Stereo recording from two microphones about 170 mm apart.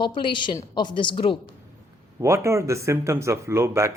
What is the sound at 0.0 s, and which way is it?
A woman's voice, 30° left (ahead or behind).